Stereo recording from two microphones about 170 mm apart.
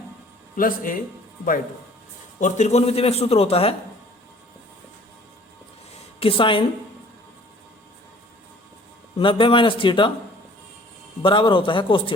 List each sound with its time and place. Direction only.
0.5 s speech: 55° left (ahead or behind)
2.4 s a man's voice: 45° left (ahead or behind)
6.1 s a man's voice: 30° left (ahead or behind)
9.1 s a man's voice: 30° left (ahead or behind)
11.2 s a man's voice: 30° left (ahead or behind)